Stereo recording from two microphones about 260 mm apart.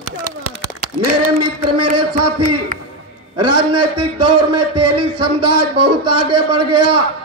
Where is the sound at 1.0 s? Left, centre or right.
Right.